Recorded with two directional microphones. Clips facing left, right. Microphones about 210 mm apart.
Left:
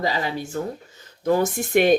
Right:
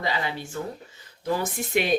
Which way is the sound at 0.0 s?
40° left (ahead or behind).